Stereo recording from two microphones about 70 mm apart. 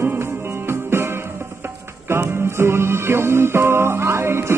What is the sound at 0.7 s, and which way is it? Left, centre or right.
Music, right.